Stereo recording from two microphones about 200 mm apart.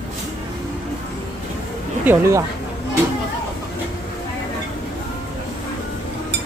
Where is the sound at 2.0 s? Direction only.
15° right (ahead or behind).